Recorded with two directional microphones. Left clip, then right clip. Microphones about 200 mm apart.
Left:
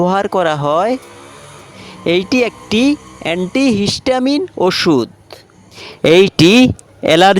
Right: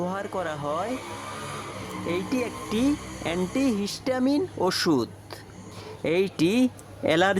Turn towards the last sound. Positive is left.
turn(degrees=40)  # may be behind; listen again after turning